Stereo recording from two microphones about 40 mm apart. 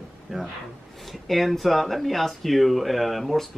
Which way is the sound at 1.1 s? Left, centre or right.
Centre.